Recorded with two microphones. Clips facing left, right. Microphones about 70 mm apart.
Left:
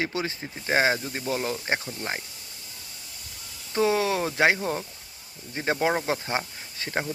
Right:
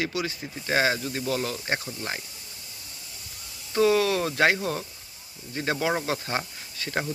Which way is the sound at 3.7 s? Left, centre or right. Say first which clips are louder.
Right 2 dB; left.